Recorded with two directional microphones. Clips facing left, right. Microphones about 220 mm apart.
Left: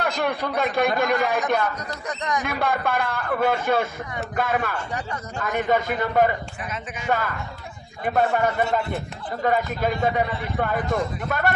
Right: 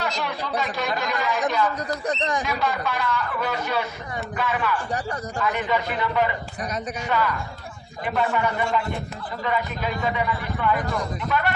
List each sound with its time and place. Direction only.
0.0 s speech: 55° left (ahead or behind)
2.0 s speech: 30° right (ahead or behind)
2.5 s a man's voice: 55° left (ahead or behind)